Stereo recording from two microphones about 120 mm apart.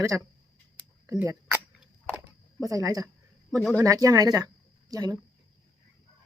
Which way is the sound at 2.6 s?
30° right (ahead or behind).